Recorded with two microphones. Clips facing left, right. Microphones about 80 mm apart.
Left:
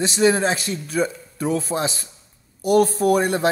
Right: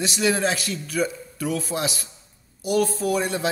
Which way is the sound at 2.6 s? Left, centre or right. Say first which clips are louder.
Left 5 dB; left.